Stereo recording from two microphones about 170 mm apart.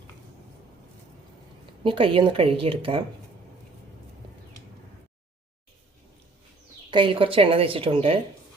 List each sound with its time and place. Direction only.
1.8 s a woman's voice: 30° right (ahead or behind)
6.9 s a woman's voice: 30° right (ahead or behind)